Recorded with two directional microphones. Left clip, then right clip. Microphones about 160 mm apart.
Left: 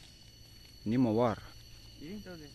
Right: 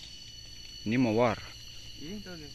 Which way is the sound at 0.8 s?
15° left (ahead or behind).